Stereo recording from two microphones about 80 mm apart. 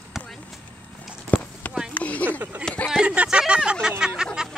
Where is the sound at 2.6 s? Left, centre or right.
Centre.